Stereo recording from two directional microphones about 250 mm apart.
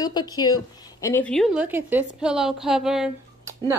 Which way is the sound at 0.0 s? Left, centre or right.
Centre.